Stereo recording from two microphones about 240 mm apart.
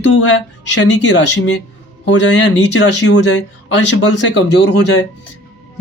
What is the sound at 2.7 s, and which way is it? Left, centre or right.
Speech, left.